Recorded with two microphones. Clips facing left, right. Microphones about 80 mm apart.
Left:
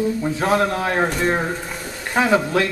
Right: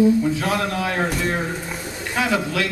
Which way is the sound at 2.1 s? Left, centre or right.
Left.